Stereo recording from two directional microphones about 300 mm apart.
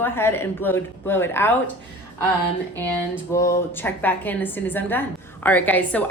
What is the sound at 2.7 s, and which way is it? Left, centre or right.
A woman's voice, centre.